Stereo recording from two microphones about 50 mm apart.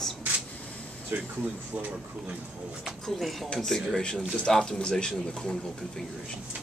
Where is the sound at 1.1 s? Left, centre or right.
Right.